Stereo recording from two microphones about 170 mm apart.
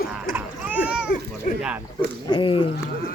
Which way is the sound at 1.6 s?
5° right (ahead or behind).